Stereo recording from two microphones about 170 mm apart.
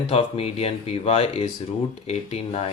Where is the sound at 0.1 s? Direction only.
35° left (ahead or behind).